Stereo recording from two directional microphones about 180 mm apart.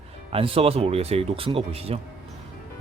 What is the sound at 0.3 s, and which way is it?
Speech, 30° right (ahead or behind).